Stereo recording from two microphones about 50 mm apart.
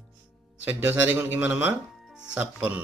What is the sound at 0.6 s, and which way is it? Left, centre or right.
Speech, right.